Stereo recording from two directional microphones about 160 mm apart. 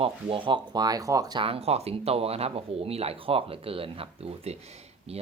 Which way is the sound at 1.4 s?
40° right (ahead or behind).